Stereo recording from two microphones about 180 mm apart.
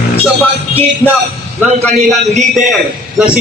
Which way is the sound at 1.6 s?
Centre (ahead or behind).